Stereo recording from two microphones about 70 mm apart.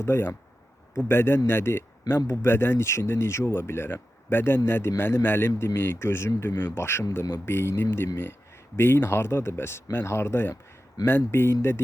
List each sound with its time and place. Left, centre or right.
0.0 s speech: left